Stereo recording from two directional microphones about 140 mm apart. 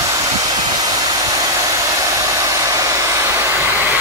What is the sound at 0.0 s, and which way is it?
Hair dryer, 25° right (ahead or behind).